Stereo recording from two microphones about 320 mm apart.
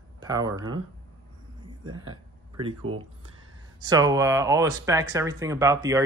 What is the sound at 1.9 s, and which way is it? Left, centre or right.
Speech, centre.